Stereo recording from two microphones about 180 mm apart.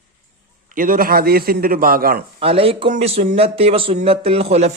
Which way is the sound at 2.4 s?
30° right (ahead or behind).